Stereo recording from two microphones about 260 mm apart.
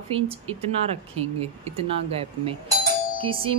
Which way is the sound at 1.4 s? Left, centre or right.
Right.